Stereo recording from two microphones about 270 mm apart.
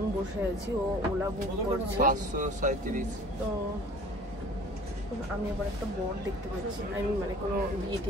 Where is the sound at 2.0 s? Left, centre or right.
Right.